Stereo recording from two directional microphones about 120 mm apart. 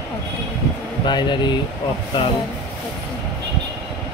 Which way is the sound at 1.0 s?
40° left (ahead or behind).